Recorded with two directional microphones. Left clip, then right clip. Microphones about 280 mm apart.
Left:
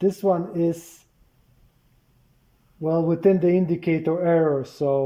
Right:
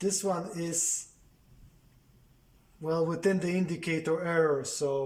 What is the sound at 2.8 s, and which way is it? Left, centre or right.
Speech, left.